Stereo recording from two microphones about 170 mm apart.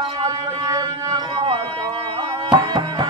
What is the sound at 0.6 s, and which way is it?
Music, 25° right (ahead or behind).